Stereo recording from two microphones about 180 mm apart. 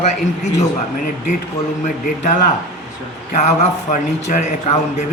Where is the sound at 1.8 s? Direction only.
40° left (ahead or behind).